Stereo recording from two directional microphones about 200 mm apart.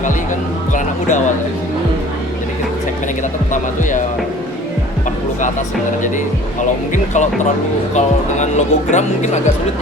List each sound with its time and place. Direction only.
0.7 s speech: 40° left (ahead or behind)
3.5 s speech: 40° left (ahead or behind)
6.0 s speech: 40° left (ahead or behind)